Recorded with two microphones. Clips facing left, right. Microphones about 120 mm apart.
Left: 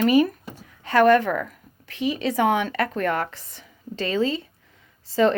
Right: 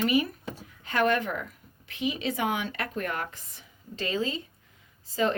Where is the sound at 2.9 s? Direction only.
75° left (ahead or behind).